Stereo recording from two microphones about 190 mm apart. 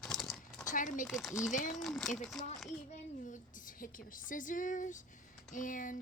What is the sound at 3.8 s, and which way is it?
Speech, 45° left (ahead or behind).